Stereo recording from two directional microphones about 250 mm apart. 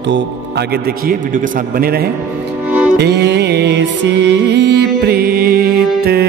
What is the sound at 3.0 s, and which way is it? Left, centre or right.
Music, right.